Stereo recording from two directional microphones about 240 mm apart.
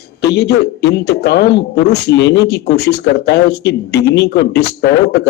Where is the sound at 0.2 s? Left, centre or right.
Left.